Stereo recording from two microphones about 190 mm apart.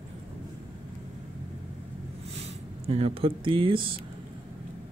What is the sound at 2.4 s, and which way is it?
Speech, 35° right (ahead or behind).